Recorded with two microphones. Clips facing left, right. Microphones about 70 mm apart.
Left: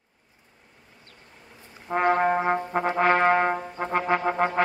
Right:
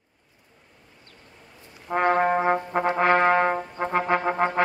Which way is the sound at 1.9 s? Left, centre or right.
Centre.